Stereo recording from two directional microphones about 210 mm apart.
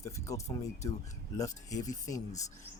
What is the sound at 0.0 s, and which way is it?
Speech, 15° left (ahead or behind).